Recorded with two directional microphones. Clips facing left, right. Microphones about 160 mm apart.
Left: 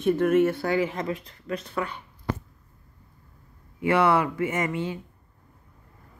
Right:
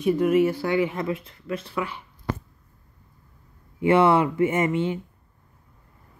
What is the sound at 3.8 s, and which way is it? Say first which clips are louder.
A man's voice: right 3 dB; 25° right (ahead or behind).